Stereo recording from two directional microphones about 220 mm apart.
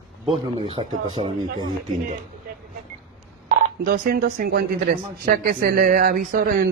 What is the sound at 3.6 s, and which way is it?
Speech, 40° right (ahead or behind).